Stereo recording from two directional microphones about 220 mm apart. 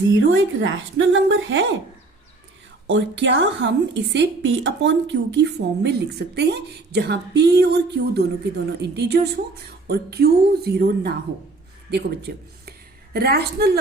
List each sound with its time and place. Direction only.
0.3 s a woman's voice: 60° right (ahead or behind)
2.8 s a woman's voice: 60° right (ahead or behind)